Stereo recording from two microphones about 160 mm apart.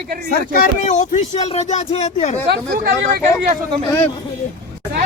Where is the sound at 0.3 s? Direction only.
65° left (ahead or behind); by 2.1 s 40° left (ahead or behind).